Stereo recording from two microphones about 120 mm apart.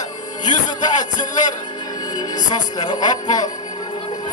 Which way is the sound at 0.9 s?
90° left.